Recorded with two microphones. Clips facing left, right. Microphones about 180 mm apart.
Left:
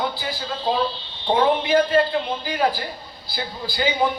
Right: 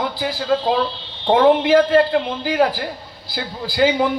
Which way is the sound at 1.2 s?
80° right.